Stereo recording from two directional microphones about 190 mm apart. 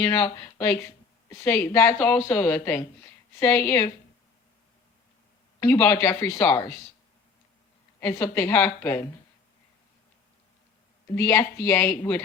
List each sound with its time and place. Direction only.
0.0 s speech: 15° left (ahead or behind)
5.8 s speech: 15° left (ahead or behind)
8.0 s speech: 15° left (ahead or behind)
11.1 s speech: 15° left (ahead or behind)